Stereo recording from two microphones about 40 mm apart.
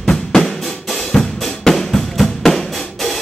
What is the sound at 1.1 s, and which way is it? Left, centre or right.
Drum, centre.